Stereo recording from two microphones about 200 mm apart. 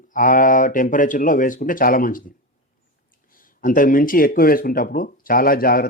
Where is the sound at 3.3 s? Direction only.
45° left (ahead or behind).